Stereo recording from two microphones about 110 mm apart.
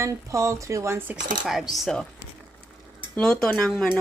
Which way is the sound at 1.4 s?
5° right (ahead or behind).